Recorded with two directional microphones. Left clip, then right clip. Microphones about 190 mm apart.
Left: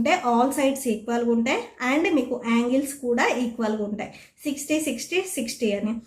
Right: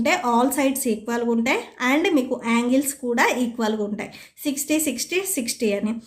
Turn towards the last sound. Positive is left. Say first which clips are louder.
# right 2 dB
turn(degrees=-20)  # may be behind; listen again after turning